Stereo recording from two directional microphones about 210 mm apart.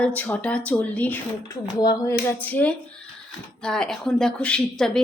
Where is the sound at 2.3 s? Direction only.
10° left (ahead or behind).